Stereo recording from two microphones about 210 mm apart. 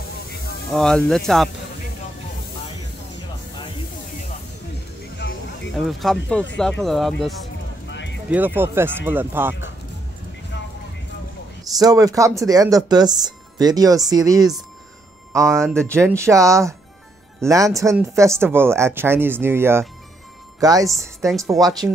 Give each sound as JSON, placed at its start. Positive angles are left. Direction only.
{"t": 0.7, "sound": "speech", "side_deg": 0}
{"t": 5.2, "sound": "music", "side_deg": 55}
{"t": 5.8, "sound": "speech", "side_deg": 0}
{"t": 7.9, "sound": "music", "side_deg": 60}
{"t": 8.3, "sound": "speech", "side_deg": -10}
{"t": 11.8, "sound": "speech", "side_deg": -15}
{"t": 15.3, "sound": "speech", "side_deg": 0}
{"t": 16.2, "sound": "speech", "side_deg": -15}